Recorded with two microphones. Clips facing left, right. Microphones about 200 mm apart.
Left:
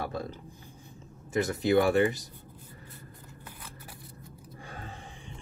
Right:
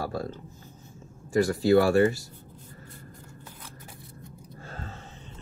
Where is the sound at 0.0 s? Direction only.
20° left (ahead or behind).